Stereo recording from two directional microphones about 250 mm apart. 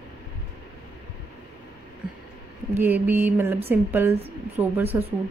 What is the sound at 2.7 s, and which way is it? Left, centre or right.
Speech, centre.